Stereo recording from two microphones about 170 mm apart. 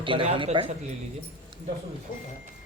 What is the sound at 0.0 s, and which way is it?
Speech, 30° right (ahead or behind).